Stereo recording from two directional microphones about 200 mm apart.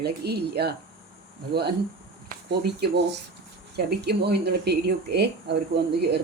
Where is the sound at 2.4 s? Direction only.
55° right (ahead or behind).